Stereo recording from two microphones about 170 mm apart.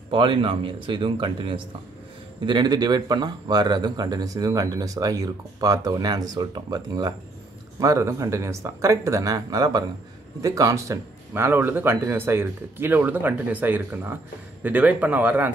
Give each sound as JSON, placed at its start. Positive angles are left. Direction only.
{"t": 0.1, "sound": "a man's voice", "side_deg": -30}